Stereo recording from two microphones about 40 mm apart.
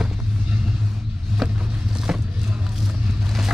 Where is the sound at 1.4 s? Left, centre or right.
Right.